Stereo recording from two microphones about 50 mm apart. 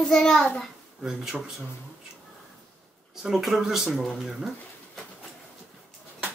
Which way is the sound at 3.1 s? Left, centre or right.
Centre.